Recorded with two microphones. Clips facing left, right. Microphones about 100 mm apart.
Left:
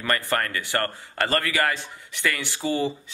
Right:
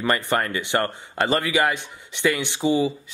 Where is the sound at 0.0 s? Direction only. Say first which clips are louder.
Right 3 dB; 20° right (ahead or behind).